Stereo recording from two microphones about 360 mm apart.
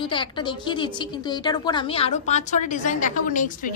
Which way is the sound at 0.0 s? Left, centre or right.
Centre.